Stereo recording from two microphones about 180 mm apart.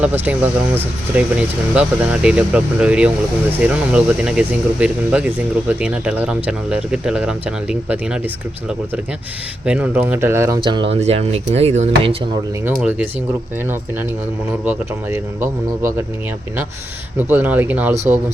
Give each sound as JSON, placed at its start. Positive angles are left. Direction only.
{"t": 0.0, "sound": "speech", "side_deg": -10}
{"t": 9.6, "sound": "speech", "side_deg": -5}
{"t": 10.6, "sound": "speech", "side_deg": -25}
{"t": 14.6, "sound": "speech", "side_deg": -10}
{"t": 15.4, "sound": "speech", "side_deg": -45}
{"t": 17.2, "sound": "speech", "side_deg": -10}
{"t": 17.9, "sound": "speech", "side_deg": -40}